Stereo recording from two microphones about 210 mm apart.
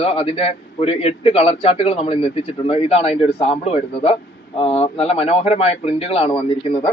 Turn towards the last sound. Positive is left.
turn(degrees=25)  # may be behind; listen again after turning